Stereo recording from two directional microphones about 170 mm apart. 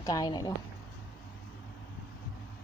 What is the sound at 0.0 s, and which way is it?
Speech, 20° left (ahead or behind).